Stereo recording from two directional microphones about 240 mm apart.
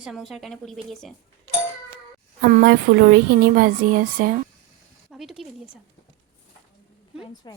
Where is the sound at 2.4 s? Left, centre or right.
Right.